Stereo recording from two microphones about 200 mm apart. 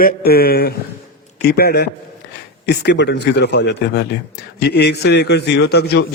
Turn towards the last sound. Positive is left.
turn(degrees=55)  # may be behind; listen again after turning